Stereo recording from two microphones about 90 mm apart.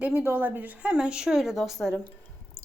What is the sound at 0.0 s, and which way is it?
Speech, 20° right (ahead or behind).